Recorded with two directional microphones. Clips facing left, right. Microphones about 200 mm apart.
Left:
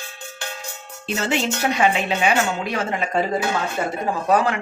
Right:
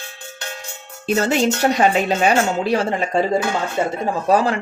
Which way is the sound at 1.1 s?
40° right (ahead or behind).